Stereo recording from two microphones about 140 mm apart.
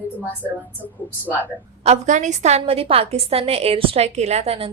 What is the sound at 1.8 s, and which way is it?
A woman's voice, 55° right (ahead or behind).